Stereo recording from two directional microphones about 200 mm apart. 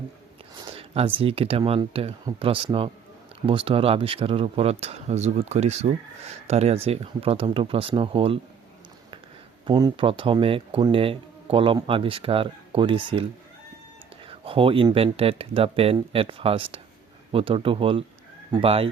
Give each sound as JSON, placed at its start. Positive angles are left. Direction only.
{"t": 0.6, "sound": "speech", "side_deg": -25}
{"t": 9.6, "sound": "speech", "side_deg": -25}
{"t": 14.3, "sound": "speech", "side_deg": -25}